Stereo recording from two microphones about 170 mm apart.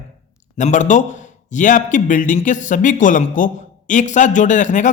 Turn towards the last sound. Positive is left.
turn(degrees=45)  # may be behind; listen again after turning